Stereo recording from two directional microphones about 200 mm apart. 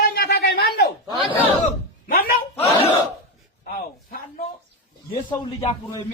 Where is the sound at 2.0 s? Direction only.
45° left (ahead or behind).